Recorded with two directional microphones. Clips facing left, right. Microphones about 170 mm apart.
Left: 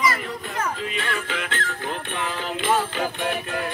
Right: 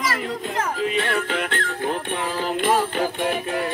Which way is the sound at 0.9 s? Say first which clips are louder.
Right 5 dB; 35° right (ahead or behind).